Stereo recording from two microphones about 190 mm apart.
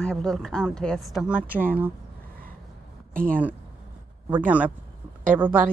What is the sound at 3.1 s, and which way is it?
Speech, 45° right (ahead or behind).